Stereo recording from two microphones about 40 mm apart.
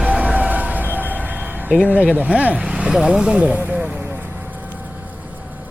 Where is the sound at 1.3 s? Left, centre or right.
Right.